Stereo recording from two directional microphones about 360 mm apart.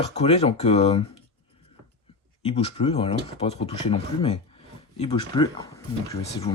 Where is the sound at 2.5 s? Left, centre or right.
Centre.